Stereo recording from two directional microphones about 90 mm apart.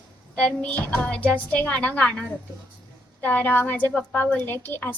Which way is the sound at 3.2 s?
15° left (ahead or behind).